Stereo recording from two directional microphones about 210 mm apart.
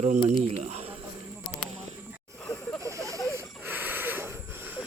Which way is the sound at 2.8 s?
15° right (ahead or behind).